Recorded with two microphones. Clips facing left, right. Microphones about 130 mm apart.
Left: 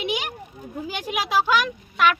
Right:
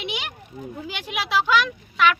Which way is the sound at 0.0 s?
45° left (ahead or behind).